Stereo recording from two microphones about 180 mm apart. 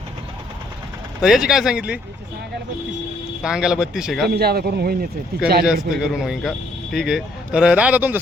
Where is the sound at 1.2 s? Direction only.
Centre (ahead or behind).